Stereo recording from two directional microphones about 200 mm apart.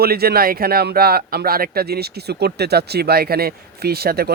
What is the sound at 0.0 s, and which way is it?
Speech, 50° right (ahead or behind).